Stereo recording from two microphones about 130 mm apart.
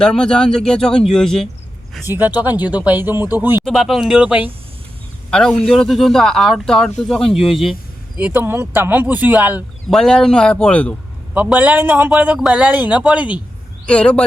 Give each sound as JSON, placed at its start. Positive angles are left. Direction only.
{"t": 0.0, "sound": "speech", "side_deg": 5}
{"t": 2.0, "sound": "a man's voice", "side_deg": -15}
{"t": 3.6, "sound": "speech", "side_deg": 0}
{"t": 5.3, "sound": "speech", "side_deg": 5}
{"t": 8.2, "sound": "a man's voice", "side_deg": -15}
{"t": 9.9, "sound": "speech", "side_deg": 5}
{"t": 11.3, "sound": "a man's voice", "side_deg": -10}
{"t": 13.8, "sound": "speech", "side_deg": 10}